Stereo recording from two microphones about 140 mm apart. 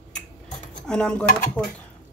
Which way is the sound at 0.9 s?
5° left (ahead or behind).